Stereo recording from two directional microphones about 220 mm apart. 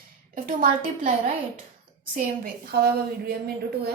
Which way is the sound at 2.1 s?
40° right (ahead or behind).